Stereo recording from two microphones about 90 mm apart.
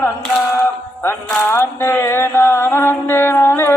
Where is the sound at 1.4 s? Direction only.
25° left (ahead or behind).